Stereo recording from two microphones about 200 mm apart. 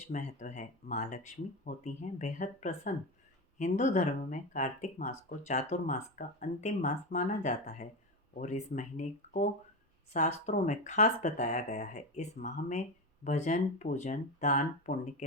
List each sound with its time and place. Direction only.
0.1 s speech: 35° left (ahead or behind)